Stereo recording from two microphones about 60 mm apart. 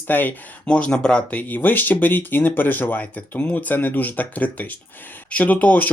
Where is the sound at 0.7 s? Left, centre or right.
Centre.